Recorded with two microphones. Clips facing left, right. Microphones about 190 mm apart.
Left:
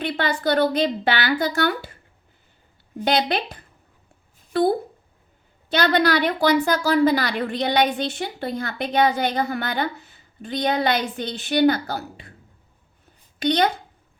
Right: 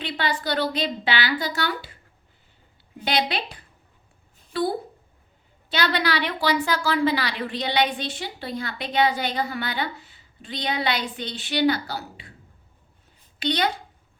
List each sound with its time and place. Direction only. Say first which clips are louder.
0.0 s a woman's voice: left 4 dB; 50° left (ahead or behind)
3.0 s a woman's voice: left 4 dB; 50° left (ahead or behind)
5.7 s a woman's voice: left 5 dB; 50° left (ahead or behind)
13.4 s a woman's voice: left 5 dB; 45° left (ahead or behind)